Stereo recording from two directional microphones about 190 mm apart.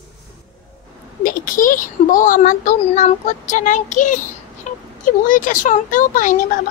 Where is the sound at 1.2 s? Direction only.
45° left (ahead or behind).